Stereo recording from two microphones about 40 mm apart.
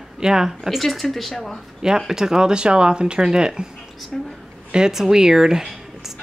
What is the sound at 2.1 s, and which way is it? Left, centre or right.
Chopping, centre.